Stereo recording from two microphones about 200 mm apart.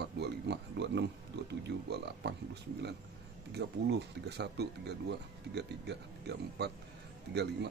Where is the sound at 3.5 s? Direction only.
55° right (ahead or behind).